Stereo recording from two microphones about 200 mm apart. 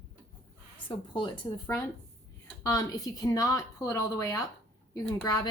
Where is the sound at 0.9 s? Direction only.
25° left (ahead or behind).